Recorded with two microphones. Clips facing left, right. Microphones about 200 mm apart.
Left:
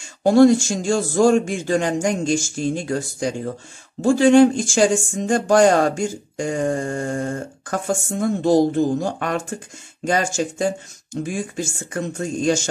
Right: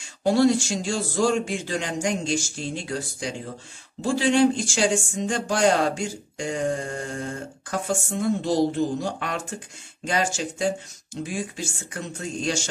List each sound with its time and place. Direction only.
0.2 s speech: 50° left (ahead or behind)